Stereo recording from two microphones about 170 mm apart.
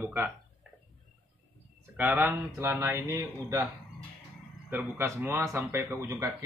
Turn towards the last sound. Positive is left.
turn(degrees=-15)  # may be behind; listen again after turning